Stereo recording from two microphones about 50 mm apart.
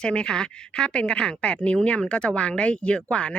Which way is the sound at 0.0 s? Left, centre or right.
Centre.